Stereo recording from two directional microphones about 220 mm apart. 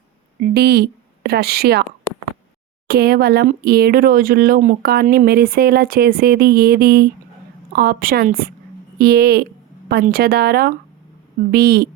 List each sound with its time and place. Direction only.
0.3 s a woman's voice: 45° right (ahead or behind)
2.8 s speech: 45° right (ahead or behind)